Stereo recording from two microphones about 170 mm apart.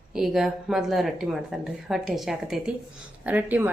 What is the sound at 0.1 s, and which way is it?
A woman's voice, 5° right (ahead or behind).